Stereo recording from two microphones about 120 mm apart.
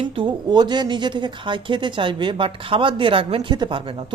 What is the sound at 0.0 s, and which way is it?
Speech, 45° right (ahead or behind).